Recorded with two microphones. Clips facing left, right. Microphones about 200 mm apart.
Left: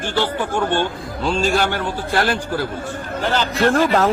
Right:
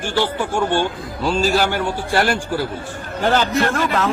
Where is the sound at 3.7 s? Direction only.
35° left (ahead or behind).